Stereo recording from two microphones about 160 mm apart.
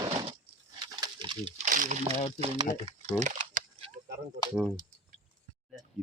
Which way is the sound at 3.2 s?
55° right (ahead or behind).